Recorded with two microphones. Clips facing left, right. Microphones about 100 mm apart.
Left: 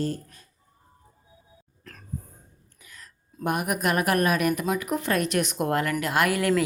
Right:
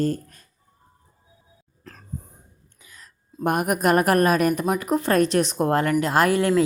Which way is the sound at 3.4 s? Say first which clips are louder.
Right 5 dB; 45° right (ahead or behind).